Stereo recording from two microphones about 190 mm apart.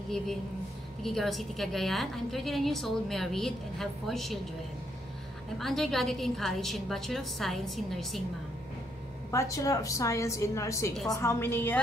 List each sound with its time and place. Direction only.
1.0 s a woman's voice: centre (ahead or behind)
5.6 s a woman's voice: centre (ahead or behind)
9.3 s a woman's voice: 15° left (ahead or behind)